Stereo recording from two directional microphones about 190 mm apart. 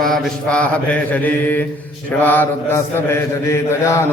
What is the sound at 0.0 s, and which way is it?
A man's voice, centre (ahead or behind).